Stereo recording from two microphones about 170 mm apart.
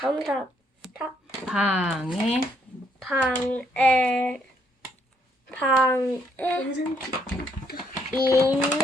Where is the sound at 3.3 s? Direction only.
5° left (ahead or behind).